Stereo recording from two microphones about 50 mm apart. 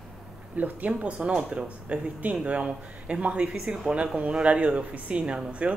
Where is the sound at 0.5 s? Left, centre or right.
Right.